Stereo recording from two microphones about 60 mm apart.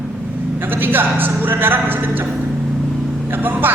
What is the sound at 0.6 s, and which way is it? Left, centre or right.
Speech, right.